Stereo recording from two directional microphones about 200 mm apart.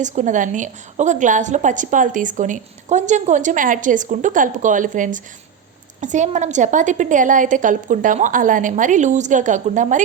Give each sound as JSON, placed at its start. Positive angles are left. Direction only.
{"t": 0.0, "sound": "a woman's voice", "side_deg": -40}